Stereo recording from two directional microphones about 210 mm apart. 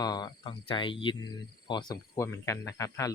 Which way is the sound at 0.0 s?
20° left (ahead or behind).